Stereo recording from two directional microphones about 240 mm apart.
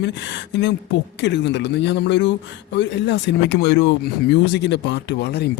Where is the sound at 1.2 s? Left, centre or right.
Left.